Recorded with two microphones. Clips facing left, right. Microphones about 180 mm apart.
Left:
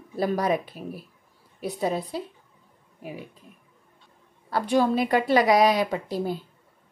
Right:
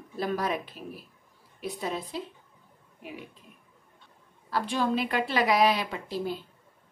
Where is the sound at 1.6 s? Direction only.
40° left (ahead or behind).